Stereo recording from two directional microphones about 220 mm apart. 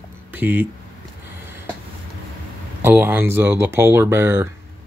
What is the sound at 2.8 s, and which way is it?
Speech, 10° right (ahead or behind).